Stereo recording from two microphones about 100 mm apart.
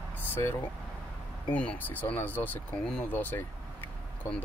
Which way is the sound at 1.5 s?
15° left (ahead or behind).